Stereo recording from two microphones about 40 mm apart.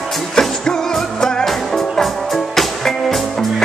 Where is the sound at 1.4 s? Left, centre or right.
Centre.